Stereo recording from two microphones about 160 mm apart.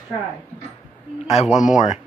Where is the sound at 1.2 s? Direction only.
45° left (ahead or behind).